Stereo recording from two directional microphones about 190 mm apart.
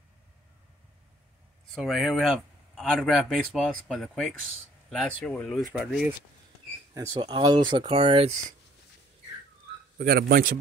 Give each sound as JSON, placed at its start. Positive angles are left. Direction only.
{"t": 1.7, "sound": "speech", "side_deg": 0}
{"t": 6.9, "sound": "speech", "side_deg": -15}
{"t": 9.9, "sound": "speech", "side_deg": -55}